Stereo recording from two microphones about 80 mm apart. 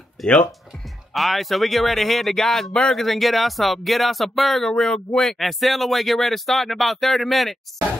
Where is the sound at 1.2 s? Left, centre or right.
Centre.